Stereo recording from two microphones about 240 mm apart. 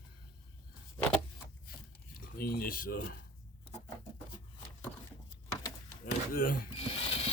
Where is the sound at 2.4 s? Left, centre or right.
Left.